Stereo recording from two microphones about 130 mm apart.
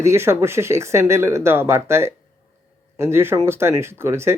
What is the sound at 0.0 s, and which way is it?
Speech, 20° right (ahead or behind).